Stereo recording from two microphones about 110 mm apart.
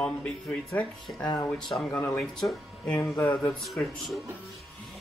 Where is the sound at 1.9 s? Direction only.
15° left (ahead or behind).